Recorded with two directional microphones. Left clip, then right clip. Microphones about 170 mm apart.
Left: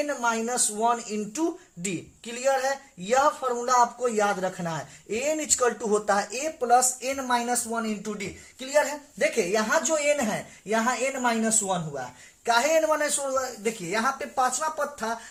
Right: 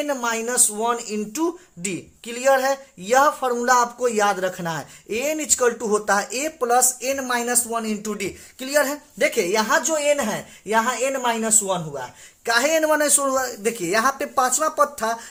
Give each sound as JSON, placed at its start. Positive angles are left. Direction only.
{"t": 0.0, "sound": "speech", "side_deg": -25}
{"t": 6.7, "sound": "speech", "side_deg": -70}
{"t": 8.5, "sound": "a woman's voice", "side_deg": -50}
{"t": 13.3, "sound": "speech", "side_deg": -65}